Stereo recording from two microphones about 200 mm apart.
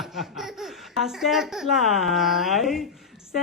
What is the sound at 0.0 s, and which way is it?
Speech, centre (ahead or behind).